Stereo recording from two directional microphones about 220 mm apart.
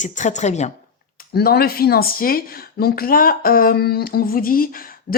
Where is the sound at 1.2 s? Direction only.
45° left (ahead or behind).